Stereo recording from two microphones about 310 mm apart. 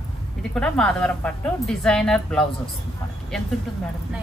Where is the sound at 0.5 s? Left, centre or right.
Centre.